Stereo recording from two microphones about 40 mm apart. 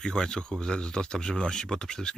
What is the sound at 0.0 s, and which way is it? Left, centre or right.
Speech, centre.